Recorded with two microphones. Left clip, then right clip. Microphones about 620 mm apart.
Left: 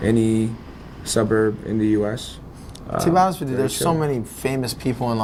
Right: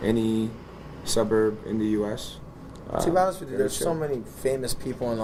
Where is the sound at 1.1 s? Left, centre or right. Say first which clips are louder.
Left 4 dB; left.